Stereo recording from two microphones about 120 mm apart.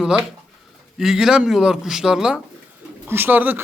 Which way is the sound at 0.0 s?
5° right (ahead or behind).